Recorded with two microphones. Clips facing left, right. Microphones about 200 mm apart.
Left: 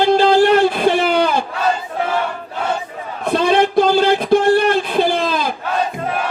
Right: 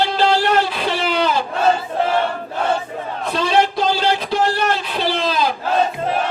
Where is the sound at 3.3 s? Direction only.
55° left (ahead or behind).